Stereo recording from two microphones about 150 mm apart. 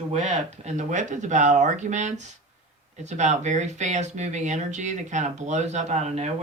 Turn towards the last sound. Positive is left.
turn(degrees=-50)  # may be behind; listen again after turning